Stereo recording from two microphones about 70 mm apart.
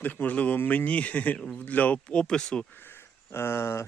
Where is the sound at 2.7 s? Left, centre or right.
Left.